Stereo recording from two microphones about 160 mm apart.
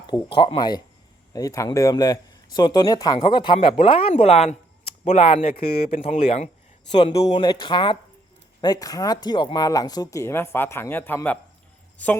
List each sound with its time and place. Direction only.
0.1 s speech: 30° left (ahead or behind); by 11.3 s 15° left (ahead or behind)